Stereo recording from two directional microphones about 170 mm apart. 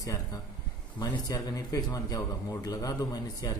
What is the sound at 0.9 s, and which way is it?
A man's voice, 25° left (ahead or behind).